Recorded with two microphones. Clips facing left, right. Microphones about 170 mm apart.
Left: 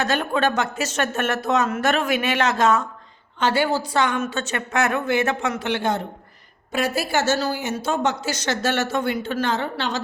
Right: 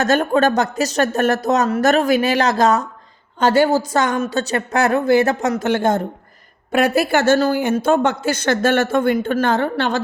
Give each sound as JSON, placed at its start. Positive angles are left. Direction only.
{"t": 0.0, "sound": "speech", "side_deg": -45}
{"t": 6.7, "sound": "speech", "side_deg": -60}